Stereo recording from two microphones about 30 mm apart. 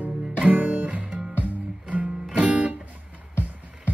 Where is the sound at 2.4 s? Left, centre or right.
Right.